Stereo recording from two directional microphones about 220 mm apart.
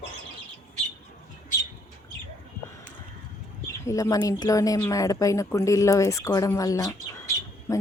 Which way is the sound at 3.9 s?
15° left (ahead or behind).